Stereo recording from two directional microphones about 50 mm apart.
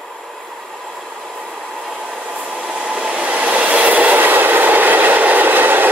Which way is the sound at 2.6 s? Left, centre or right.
Centre.